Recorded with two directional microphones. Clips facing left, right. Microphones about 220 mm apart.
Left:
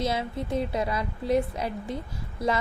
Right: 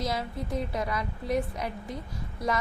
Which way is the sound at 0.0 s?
25° left (ahead or behind).